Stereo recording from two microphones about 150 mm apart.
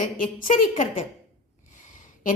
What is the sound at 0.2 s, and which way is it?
Speech, 65° left (ahead or behind).